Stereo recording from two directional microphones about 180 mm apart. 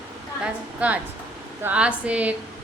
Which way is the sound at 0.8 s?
5° right (ahead or behind).